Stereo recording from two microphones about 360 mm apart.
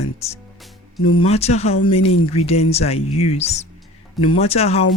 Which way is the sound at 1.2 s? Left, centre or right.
Centre.